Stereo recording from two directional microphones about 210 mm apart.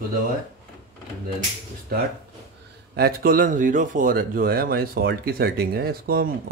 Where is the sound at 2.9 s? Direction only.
45° right (ahead or behind).